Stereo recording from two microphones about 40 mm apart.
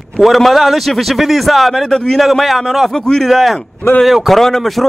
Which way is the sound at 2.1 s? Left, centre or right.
Centre.